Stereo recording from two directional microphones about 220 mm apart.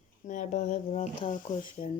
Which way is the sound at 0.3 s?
35° left (ahead or behind).